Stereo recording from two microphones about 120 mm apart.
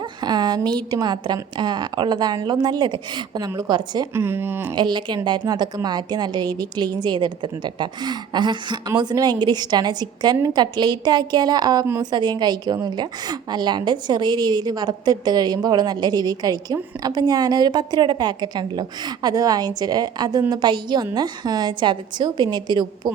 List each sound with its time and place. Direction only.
0.2 s a woman's voice: 35° right (ahead or behind)
4.1 s speech: 20° right (ahead or behind)
4.7 s a woman's voice: 40° right (ahead or behind)